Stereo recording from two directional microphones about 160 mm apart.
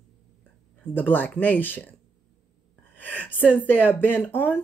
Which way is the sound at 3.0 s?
10° left (ahead or behind).